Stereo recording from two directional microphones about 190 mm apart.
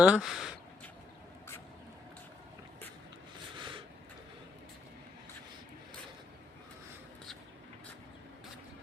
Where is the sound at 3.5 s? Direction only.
25° right (ahead or behind).